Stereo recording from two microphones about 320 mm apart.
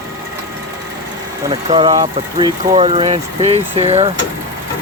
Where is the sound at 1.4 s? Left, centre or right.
Centre.